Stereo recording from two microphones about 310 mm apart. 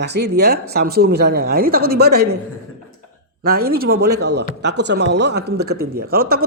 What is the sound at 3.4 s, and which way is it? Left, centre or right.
Speech, right.